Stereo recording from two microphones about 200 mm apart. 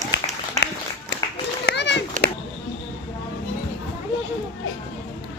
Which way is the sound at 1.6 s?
60° left (ahead or behind).